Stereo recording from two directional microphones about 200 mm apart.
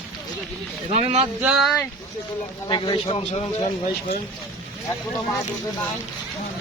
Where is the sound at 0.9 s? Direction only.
35° right (ahead or behind).